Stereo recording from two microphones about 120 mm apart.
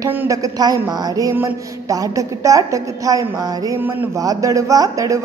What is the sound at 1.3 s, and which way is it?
Speech, 20° right (ahead or behind).